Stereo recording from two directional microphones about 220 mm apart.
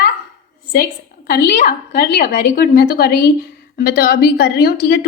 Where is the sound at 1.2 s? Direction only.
40° left (ahead or behind).